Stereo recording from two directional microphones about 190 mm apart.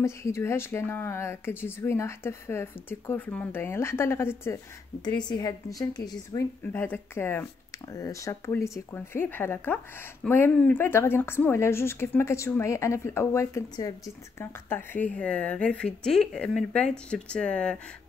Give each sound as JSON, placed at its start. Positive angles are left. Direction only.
{"t": 0.0, "sound": "speech", "side_deg": 15}
{"t": 5.0, "sound": "a woman's voice", "side_deg": 25}